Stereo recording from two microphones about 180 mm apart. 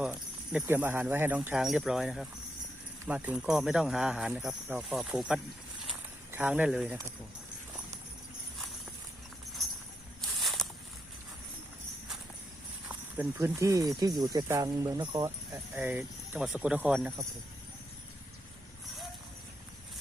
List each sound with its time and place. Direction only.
0.0 s jingle bell: 5° right (ahead or behind)
0.6 s speech: 10° right (ahead or behind)
10.2 s walk: centre (ahead or behind)
12.9 s speech: 15° right (ahead or behind)
15.7 s speech: 10° right (ahead or behind)